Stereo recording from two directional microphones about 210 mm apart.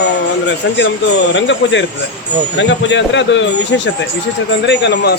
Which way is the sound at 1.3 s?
60° left (ahead or behind).